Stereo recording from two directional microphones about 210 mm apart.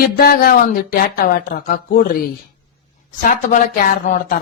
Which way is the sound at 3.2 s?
40° left (ahead or behind).